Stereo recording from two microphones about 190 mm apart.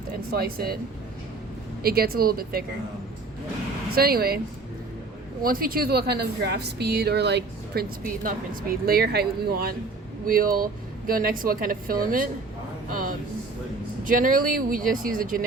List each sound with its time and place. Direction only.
0.3 s speech: 55° right (ahead or behind)
1.8 s speech: 55° right (ahead or behind)
3.9 s speech: 55° right (ahead or behind)
5.4 s speech: 50° right (ahead or behind)